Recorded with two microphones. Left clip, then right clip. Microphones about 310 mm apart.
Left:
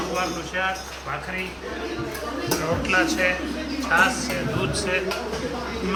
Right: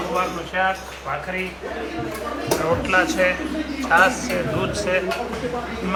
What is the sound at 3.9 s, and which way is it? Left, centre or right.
Speech, centre.